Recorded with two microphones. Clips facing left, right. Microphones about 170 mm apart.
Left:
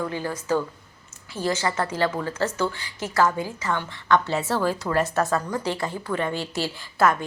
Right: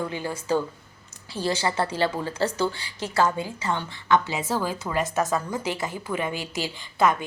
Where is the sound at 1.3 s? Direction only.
30° right (ahead or behind).